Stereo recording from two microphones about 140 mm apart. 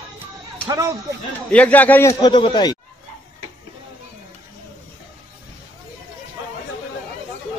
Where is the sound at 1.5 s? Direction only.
10° left (ahead or behind).